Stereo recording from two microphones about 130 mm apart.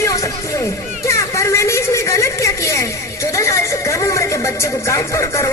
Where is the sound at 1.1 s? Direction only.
25° left (ahead or behind).